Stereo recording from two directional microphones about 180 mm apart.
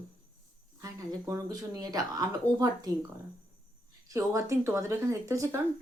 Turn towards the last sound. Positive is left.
turn(degrees=-15)  # may be behind; listen again after turning